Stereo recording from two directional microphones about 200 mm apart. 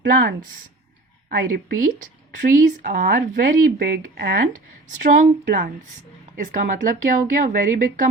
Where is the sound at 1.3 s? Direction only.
45° right (ahead or behind).